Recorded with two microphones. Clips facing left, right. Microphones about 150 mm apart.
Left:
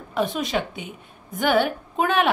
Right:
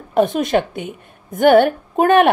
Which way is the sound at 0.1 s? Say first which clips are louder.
Right 8 dB; 50° right (ahead or behind).